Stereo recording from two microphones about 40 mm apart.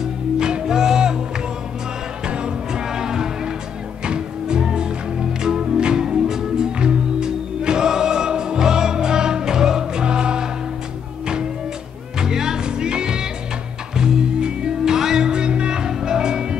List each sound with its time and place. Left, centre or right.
0.4 s music: centre
2.2 s music: right
12.2 s music: centre